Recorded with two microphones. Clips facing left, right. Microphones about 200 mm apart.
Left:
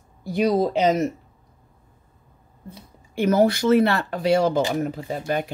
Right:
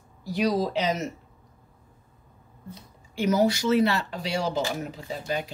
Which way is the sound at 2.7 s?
55° left (ahead or behind).